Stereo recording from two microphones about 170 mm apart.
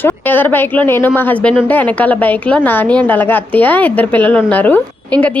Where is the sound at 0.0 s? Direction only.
10° left (ahead or behind).